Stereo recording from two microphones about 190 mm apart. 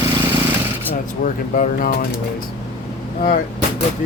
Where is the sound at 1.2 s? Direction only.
50° left (ahead or behind).